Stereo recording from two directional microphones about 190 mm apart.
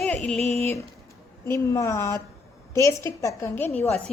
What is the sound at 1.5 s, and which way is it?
A woman's voice, 15° left (ahead or behind).